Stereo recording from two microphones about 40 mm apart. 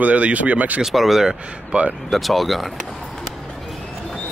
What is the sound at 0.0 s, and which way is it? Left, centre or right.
Speech, right.